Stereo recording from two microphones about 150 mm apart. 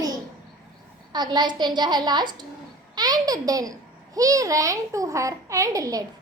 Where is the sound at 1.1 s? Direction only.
30° right (ahead or behind).